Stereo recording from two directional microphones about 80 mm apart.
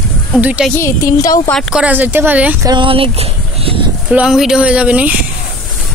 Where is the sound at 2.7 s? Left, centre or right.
Right.